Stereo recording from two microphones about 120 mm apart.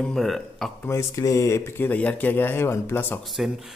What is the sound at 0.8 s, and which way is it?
Speech, 25° left (ahead or behind).